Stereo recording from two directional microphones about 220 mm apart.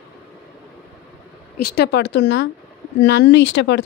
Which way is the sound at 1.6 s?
45° left (ahead or behind).